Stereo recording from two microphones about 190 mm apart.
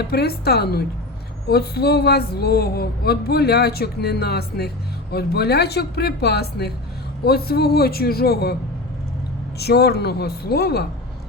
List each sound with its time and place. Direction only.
0.0 s a woman's voice: 55° left (ahead or behind)
9.6 s a woman's voice: 55° left (ahead or behind)